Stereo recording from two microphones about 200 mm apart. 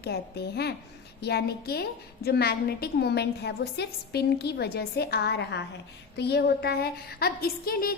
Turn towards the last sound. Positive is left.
turn(degrees=50)  # may be behind; listen again after turning